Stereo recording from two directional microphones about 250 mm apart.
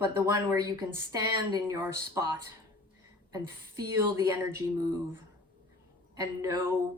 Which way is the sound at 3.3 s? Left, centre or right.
Centre.